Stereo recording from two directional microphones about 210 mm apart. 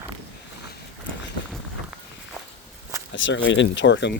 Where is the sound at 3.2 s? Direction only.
60° left (ahead or behind).